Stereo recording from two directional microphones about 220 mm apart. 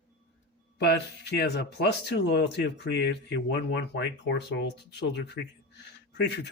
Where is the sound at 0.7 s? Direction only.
50° left (ahead or behind).